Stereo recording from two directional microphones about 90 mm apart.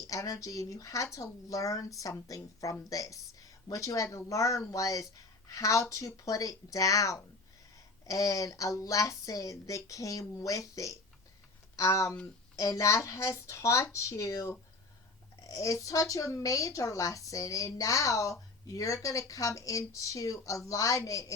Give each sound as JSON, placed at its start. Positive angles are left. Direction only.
{"t": 0.1, "sound": "a woman's voice", "side_deg": 40}